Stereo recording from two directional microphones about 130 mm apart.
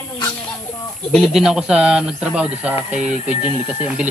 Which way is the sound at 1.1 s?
5° right (ahead or behind).